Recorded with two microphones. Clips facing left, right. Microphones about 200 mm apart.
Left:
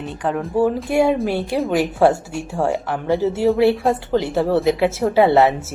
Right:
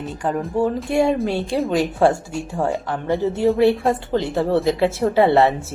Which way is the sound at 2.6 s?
20° left (ahead or behind).